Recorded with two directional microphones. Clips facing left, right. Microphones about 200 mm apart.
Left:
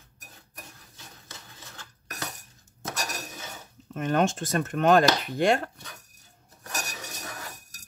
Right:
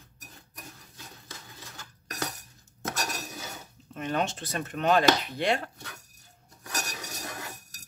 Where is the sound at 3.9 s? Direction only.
50° left (ahead or behind).